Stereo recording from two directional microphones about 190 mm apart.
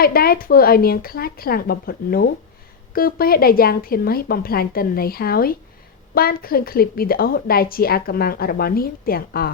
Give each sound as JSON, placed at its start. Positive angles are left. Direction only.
{"t": 0.0, "sound": "a woman's voice", "side_deg": 50}